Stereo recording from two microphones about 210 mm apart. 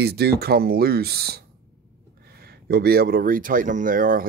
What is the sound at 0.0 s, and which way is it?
Speech, 50° right (ahead or behind).